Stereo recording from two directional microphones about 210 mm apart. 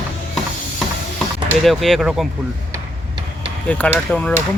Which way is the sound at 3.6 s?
5° left (ahead or behind).